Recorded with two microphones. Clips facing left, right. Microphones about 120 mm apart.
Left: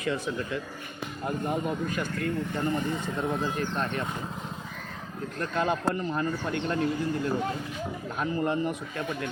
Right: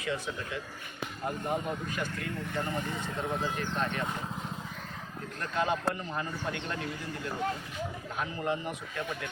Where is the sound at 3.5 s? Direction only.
45° left (ahead or behind).